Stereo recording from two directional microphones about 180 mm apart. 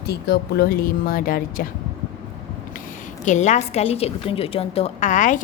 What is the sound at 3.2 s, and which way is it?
A woman's voice, 40° left (ahead or behind).